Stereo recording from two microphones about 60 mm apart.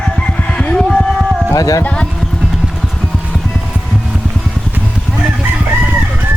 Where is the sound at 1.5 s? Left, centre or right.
Left.